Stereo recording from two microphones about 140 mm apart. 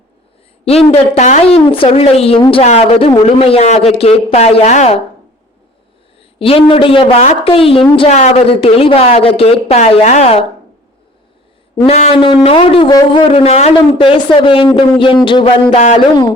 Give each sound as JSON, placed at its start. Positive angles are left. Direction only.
{"t": 0.9, "sound": "a man's voice", "side_deg": 45}
{"t": 6.1, "sound": "a woman's voice", "side_deg": 40}
{"t": 11.9, "sound": "a woman's voice", "side_deg": 50}
{"t": 13.2, "sound": "a woman's voice", "side_deg": 45}